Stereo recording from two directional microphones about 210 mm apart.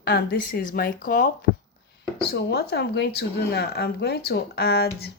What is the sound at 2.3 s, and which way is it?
Speech, 50° left (ahead or behind).